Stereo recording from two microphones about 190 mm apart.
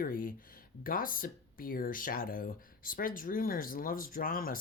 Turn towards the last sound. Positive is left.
turn(degrees=50)  # may be behind; listen again after turning